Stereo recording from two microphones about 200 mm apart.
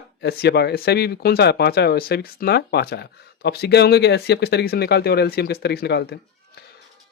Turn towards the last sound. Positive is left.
turn(degrees=55)  # may be behind; listen again after turning